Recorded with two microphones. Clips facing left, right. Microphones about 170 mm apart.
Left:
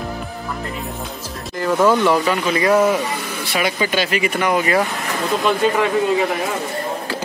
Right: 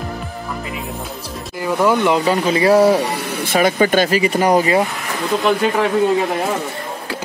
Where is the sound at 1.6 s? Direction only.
10° right (ahead or behind).